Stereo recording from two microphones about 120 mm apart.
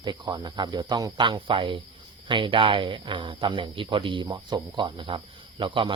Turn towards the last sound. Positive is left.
turn(degrees=-45)  # may be behind; listen again after turning